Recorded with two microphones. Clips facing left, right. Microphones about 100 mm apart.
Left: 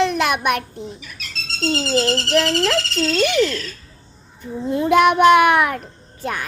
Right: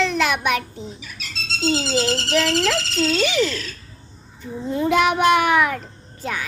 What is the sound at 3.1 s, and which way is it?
Child singing, 55° left (ahead or behind).